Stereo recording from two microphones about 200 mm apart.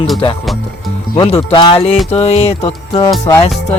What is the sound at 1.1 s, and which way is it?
Music, 25° left (ahead or behind).